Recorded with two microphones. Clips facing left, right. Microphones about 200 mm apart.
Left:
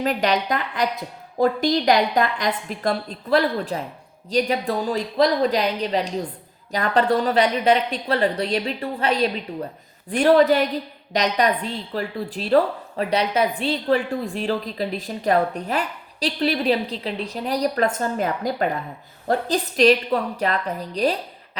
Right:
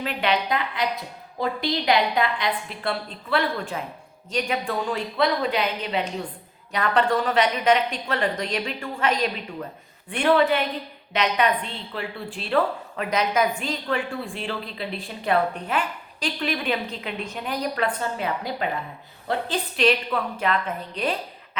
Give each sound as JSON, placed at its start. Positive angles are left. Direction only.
{"t": 0.0, "sound": "a woman's voice", "side_deg": 40}